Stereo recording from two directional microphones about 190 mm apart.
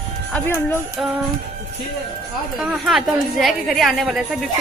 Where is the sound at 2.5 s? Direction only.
Centre (ahead or behind).